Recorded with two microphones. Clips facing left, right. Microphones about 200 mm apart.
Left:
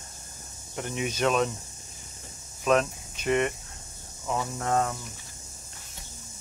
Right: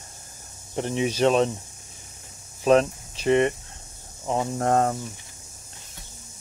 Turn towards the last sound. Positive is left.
turn(degrees=-45)  # may be behind; listen again after turning